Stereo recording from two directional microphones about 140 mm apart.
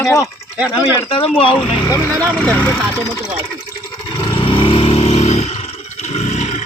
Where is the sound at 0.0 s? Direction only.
20° left (ahead or behind).